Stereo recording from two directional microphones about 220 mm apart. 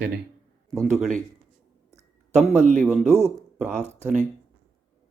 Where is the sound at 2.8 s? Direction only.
Centre (ahead or behind).